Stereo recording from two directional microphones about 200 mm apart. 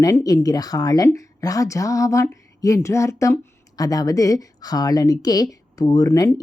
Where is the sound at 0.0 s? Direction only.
15° left (ahead or behind).